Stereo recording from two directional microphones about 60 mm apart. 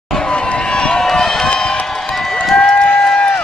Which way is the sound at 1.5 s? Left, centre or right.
Centre.